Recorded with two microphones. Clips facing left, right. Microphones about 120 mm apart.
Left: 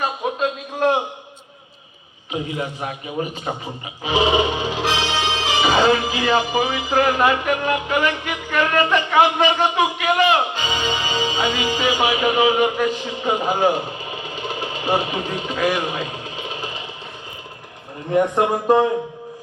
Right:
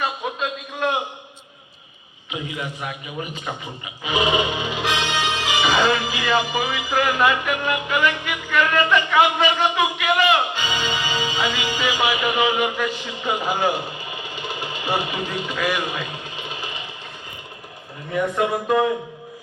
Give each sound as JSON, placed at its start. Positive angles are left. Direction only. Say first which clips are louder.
{"t": 0.0, "sound": "a sound", "louder": "left 4 dB", "side_deg": 35}
{"t": 2.3, "sound": "a man's voice", "louder": "left 4 dB", "side_deg": 35}
{"t": 4.0, "sound": "music", "louder": "left 3 dB", "side_deg": 30}
{"t": 18.1, "sound": "a man's voice", "louder": "left 4 dB", "side_deg": 40}